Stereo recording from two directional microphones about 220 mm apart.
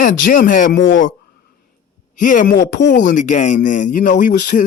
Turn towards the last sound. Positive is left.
turn(degrees=35)  # may be behind; listen again after turning